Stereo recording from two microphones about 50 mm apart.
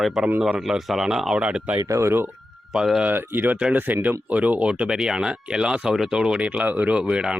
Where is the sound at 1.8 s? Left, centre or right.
Right.